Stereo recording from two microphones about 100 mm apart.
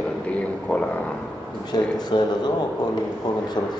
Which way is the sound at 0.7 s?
15° left (ahead or behind).